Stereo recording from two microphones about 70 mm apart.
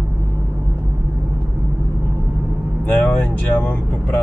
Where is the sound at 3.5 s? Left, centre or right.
Left.